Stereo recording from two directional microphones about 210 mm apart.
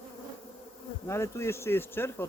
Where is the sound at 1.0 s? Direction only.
15° left (ahead or behind).